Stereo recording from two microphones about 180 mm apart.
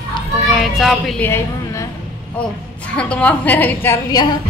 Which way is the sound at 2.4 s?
5° left (ahead or behind).